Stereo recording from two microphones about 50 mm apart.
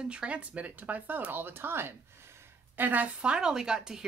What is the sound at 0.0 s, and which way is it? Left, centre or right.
Speech, right.